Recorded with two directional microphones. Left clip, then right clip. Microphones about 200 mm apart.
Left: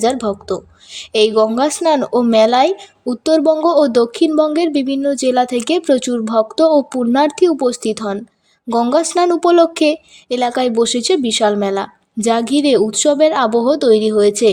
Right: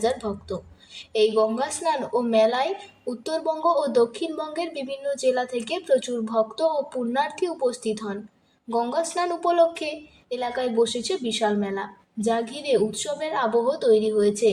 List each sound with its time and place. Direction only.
0.0 s a woman's voice: 50° left (ahead or behind)